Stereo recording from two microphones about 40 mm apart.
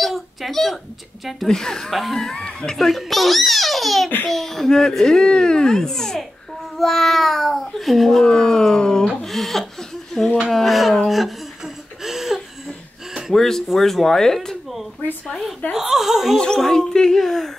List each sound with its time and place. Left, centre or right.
0.0 s a sound: centre
1.5 s speech: centre
1.9 s a child's voice: centre
2.1 s speech: centre
3.0 s a child's voice: centre
8.3 s speech: centre
9.2 s a sound: centre
10.5 s a child's voice: centre
11.6 s a sound: centre
13.3 s speech: centre
15.7 s speech: centre
16.5 s speech: centre